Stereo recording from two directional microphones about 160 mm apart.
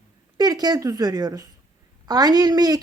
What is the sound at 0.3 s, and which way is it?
A woman's voice, 25° right (ahead or behind).